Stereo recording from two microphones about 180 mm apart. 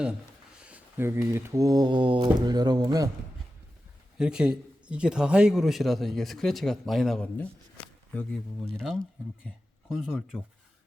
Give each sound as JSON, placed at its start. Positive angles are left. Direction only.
{"t": 0.6, "sound": "speech", "side_deg": -10}
{"t": 4.2, "sound": "a man's voice", "side_deg": -5}